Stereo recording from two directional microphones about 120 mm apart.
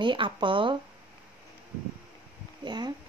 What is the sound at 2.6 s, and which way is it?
Speech, 35° right (ahead or behind).